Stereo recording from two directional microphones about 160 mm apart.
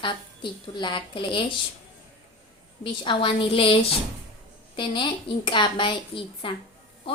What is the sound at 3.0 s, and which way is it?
A woman's voice, 30° left (ahead or behind).